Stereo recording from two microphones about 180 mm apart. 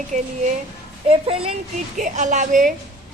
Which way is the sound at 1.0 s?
35° right (ahead or behind).